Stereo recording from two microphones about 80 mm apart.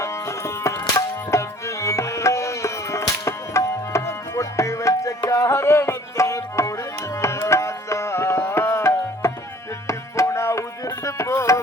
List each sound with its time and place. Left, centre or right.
0.0 s tabla: left
9.8 s music: left
10.8 s a sound: left